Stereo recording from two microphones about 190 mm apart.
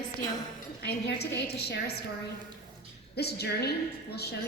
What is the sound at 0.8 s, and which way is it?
A woman's voice, 60° left (ahead or behind).